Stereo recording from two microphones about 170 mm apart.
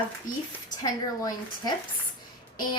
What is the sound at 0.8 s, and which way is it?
Speech, 20° left (ahead or behind).